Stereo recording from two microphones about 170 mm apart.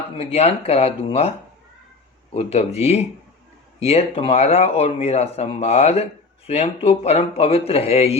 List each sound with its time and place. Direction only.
0.2 s speech: 35° left (ahead or behind)
2.3 s speech: 40° left (ahead or behind)
3.8 s speech: 35° left (ahead or behind)